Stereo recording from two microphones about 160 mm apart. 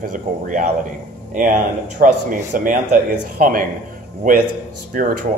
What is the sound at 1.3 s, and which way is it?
A man's voice, 55° right (ahead or behind).